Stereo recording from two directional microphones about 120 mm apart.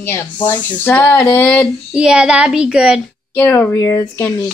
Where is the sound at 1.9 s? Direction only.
10° right (ahead or behind).